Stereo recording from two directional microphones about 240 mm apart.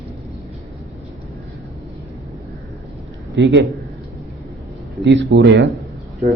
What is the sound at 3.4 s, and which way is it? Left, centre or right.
Speech, right.